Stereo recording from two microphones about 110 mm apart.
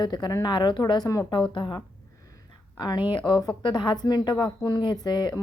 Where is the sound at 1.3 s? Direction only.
50° left (ahead or behind).